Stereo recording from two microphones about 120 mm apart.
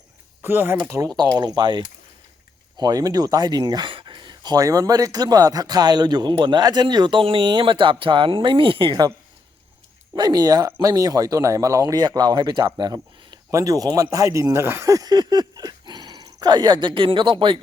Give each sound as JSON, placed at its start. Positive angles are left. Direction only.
{"t": 0.4, "sound": "speech", "side_deg": -20}
{"t": 10.2, "sound": "speech", "side_deg": -35}